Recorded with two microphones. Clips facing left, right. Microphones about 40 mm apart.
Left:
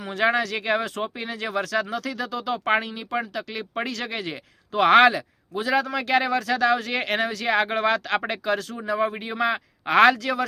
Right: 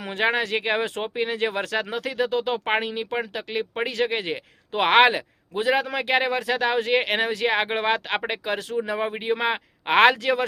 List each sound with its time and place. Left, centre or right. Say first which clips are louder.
0.0 s speech: left 1 dB; right
5.1 s speech: right 1 dB; right